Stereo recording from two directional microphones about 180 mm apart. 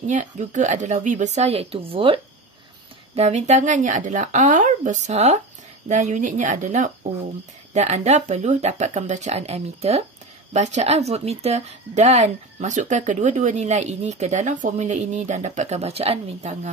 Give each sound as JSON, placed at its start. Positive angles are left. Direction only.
{"t": 0.0, "sound": "speech", "side_deg": -40}
{"t": 3.2, "sound": "speech", "side_deg": -40}